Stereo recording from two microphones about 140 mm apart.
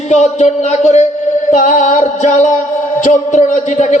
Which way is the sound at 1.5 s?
65° left (ahead or behind).